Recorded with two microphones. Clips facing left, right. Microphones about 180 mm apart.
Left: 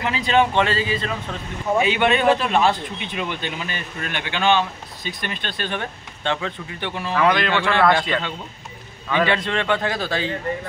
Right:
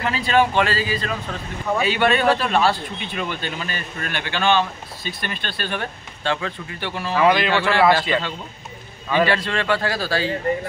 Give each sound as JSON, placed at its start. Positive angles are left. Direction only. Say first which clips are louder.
{"t": 0.0, "sound": "a man's voice", "louder": "even", "side_deg": 20}
{"t": 7.1, "sound": "a man's voice", "louder": "right 2 dB", "side_deg": -5}
{"t": 9.3, "sound": "a man's voice", "louder": "even", "side_deg": 20}